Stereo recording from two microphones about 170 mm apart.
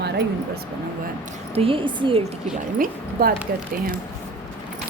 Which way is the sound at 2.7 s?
60° right (ahead or behind).